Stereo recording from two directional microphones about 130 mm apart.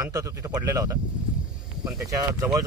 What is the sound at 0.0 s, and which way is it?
Speech, 25° right (ahead or behind).